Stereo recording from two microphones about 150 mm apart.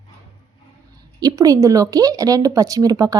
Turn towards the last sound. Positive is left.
turn(degrees=-25)  # may be behind; listen again after turning